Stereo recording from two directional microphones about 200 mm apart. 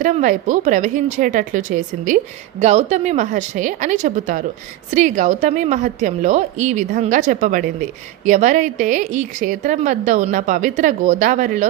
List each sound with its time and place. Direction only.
0.0 s a woman's voice: 40° right (ahead or behind)